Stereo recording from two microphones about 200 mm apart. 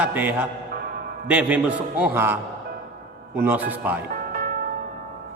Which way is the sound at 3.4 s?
10° right (ahead or behind).